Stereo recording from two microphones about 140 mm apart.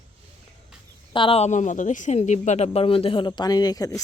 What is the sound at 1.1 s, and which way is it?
A woman's voice, 40° left (ahead or behind).